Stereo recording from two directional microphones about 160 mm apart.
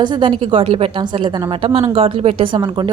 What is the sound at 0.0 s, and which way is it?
A woman's voice, 30° right (ahead or behind).